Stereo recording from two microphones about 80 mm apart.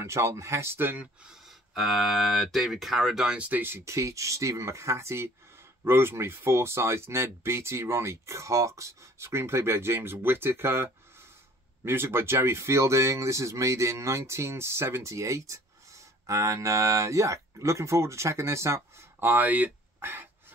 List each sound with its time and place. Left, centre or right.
0.0 s speech: right
1.2 s speech: centre
3.3 s speech: right
3.8 s speech: right